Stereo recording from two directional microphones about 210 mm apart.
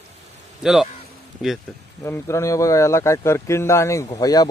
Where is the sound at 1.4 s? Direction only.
Centre (ahead or behind).